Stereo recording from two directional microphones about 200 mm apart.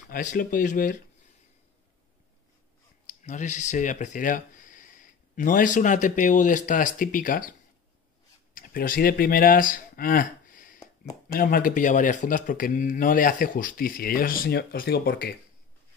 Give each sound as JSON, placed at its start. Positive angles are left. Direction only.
{"t": 0.1, "sound": "speech", "side_deg": 40}
{"t": 3.1, "sound": "speech", "side_deg": 40}
{"t": 8.5, "sound": "speech", "side_deg": 45}